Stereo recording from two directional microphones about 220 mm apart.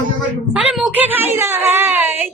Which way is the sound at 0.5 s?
5° right (ahead or behind).